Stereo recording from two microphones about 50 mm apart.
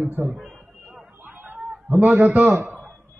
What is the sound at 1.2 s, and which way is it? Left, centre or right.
Chatter, right.